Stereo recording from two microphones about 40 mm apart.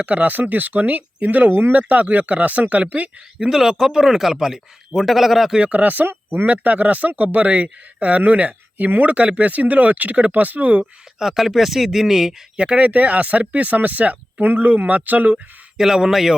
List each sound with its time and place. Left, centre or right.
0.0 s speech: right
1.9 s speech: right
3.4 s a man's voice: centre
5.7 s speech: right
11.2 s a man's voice: centre
12.5 s speech: right
12.8 s speech: right
15.8 s a man's voice: centre